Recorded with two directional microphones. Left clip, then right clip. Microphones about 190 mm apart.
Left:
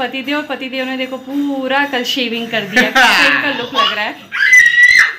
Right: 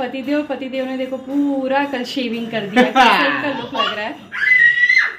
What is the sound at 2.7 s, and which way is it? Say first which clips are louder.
Speech: left 2 dB; 15° right (ahead or behind).